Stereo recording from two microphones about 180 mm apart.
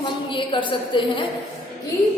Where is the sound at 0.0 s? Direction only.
25° left (ahead or behind).